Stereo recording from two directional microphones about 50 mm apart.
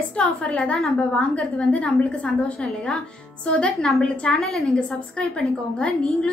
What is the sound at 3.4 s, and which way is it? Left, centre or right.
Speech, left.